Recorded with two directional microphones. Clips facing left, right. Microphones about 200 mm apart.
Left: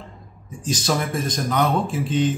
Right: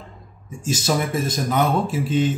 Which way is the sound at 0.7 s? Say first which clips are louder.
Right 1 dB; 5° right (ahead or behind).